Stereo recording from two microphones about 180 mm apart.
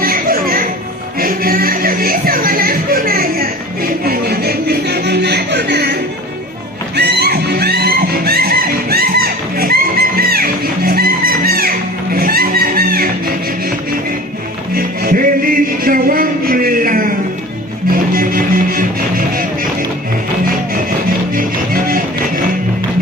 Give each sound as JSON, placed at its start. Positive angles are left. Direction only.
{"t": 0.0, "sound": "music", "side_deg": -55}
{"t": 4.0, "sound": "a sound", "side_deg": -60}
{"t": 6.9, "sound": "music", "side_deg": -65}
{"t": 14.8, "sound": "music", "side_deg": -50}
{"t": 21.3, "sound": "music", "side_deg": -55}